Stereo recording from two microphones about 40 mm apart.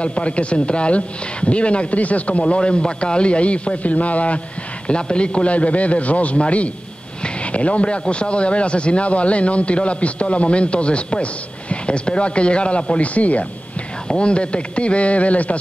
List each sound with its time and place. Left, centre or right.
0.0 s a man's voice: left
4.8 s a man's voice: left
14.0 s speech: left